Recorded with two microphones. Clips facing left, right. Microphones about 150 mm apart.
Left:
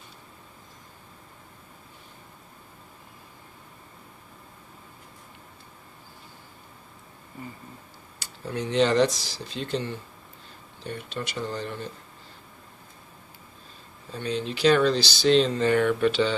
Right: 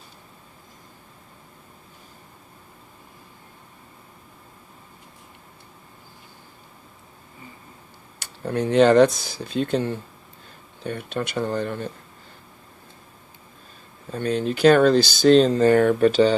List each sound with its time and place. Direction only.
8.2 s speech: 55° right (ahead or behind)
14.1 s speech: 50° right (ahead or behind)